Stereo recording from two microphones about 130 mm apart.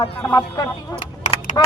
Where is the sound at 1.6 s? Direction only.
30° left (ahead or behind).